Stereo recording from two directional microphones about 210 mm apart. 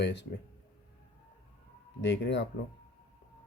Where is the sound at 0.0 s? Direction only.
55° left (ahead or behind).